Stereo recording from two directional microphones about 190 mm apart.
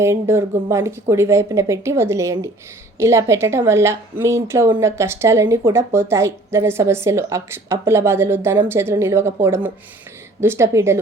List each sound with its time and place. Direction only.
0.0 s speech: 15° right (ahead or behind)